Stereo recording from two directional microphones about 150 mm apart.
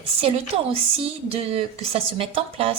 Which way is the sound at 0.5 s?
40° right (ahead or behind).